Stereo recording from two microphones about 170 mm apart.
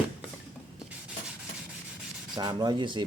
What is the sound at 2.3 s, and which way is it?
Rub, 25° right (ahead or behind).